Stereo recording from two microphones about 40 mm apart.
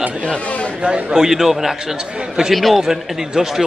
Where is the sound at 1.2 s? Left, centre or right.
Centre.